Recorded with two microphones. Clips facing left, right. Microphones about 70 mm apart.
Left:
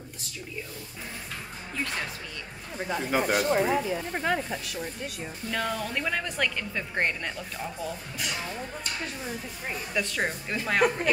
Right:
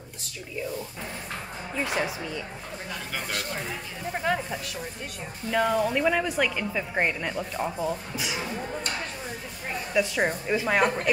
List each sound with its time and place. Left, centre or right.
2.9 s speech: left
4.1 s speech: centre
7.3 s speech: centre
8.2 s speech: centre
9.9 s speech: centre